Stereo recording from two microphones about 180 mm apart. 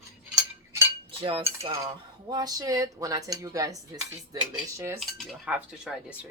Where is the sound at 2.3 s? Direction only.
20° right (ahead or behind).